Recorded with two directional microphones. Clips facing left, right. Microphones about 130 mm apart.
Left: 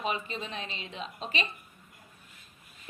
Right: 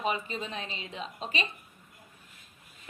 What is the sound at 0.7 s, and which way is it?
Speech, 35° left (ahead or behind).